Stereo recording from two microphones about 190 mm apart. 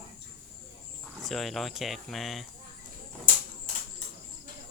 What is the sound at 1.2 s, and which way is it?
Speech, centre (ahead or behind).